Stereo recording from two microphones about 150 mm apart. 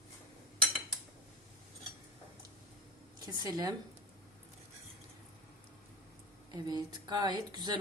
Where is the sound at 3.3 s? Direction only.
25° right (ahead or behind).